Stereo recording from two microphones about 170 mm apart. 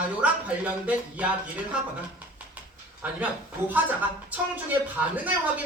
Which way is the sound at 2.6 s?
10° right (ahead or behind).